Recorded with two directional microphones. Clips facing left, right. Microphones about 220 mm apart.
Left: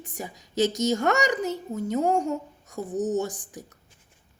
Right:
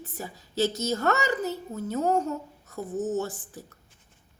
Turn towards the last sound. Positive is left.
turn(degrees=15)  # may be behind; listen again after turning